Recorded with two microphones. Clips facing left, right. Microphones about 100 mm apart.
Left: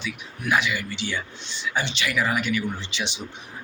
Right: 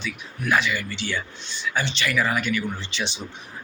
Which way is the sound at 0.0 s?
15° left (ahead or behind).